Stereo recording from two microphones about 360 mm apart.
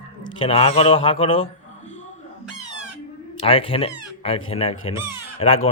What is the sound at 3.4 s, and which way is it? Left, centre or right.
Speech, centre.